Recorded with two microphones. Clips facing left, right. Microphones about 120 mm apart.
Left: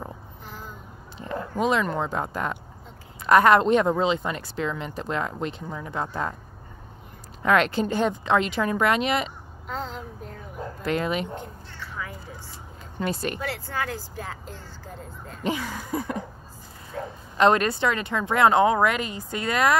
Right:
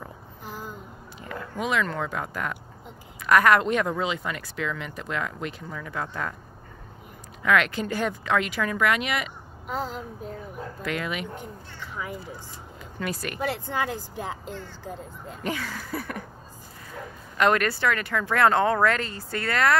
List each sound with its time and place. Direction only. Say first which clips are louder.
1.2 s bow-wow: left 5 dB; 30° left (ahead or behind)
1.9 s speech: left 3 dB; 30° left (ahead or behind)
7.4 s speech: left 2 dB; 35° left (ahead or behind)
9.7 s speech: right 2 dB; 10° right (ahead or behind)
10.8 s speech: left 5 dB; 30° left (ahead or behind)
13.0 s speech: left 4 dB; 30° left (ahead or behind)
13.4 s speech: right 2 dB; 20° right (ahead or behind)
15.4 s speech: left 3 dB; 20° left (ahead or behind)